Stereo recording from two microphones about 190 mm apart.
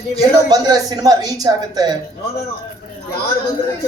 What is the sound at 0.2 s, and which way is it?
A man's voice, 20° right (ahead or behind).